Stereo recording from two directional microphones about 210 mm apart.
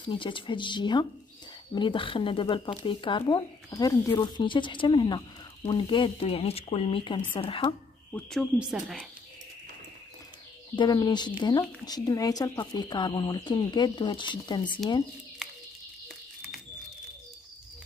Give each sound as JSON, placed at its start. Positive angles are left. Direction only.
{"t": 0.0, "sound": "speech", "side_deg": 25}
{"t": 8.1, "sound": "speech", "side_deg": 0}
{"t": 10.8, "sound": "speech", "side_deg": 20}